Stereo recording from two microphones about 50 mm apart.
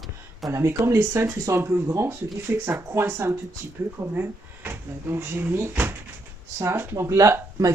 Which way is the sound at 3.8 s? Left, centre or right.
Right.